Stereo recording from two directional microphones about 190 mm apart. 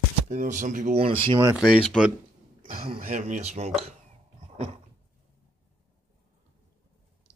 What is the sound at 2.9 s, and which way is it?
Speech, 40° right (ahead or behind).